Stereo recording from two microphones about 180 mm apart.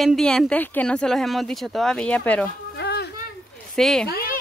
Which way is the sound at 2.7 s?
65° left (ahead or behind).